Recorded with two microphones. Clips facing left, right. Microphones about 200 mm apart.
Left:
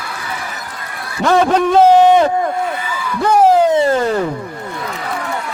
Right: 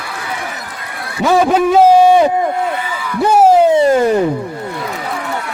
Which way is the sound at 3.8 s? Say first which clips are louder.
Right 3 dB; 15° right (ahead or behind).